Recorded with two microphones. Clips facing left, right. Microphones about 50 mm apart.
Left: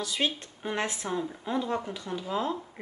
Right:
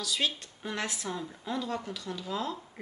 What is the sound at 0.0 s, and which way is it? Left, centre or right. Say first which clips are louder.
A woman's voice: left 2 dB; left.